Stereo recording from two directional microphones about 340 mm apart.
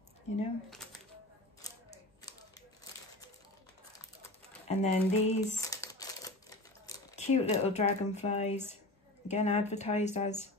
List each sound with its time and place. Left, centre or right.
0.7 s music: centre
4.6 s speech: centre